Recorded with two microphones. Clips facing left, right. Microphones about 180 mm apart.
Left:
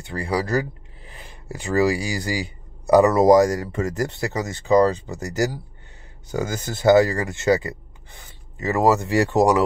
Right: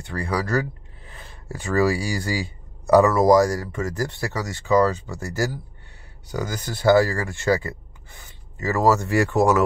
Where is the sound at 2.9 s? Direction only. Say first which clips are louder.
Left 1 dB; 20° left (ahead or behind).